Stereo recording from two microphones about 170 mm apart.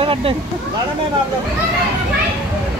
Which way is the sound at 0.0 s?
30° right (ahead or behind).